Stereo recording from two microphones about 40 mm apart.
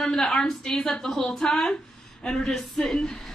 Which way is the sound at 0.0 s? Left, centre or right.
Centre.